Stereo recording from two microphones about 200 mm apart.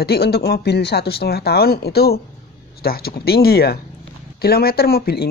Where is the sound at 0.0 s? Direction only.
50° left (ahead or behind).